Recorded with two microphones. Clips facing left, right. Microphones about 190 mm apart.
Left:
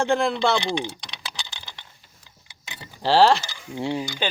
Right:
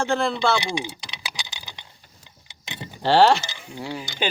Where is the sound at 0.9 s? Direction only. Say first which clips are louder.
Even; 5° right (ahead or behind).